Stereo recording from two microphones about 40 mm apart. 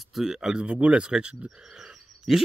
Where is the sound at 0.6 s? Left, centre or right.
Right.